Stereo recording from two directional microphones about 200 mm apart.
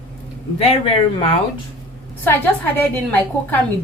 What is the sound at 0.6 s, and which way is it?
Speech, 30° left (ahead or behind).